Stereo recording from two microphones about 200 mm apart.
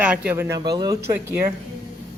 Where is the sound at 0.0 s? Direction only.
5° right (ahead or behind).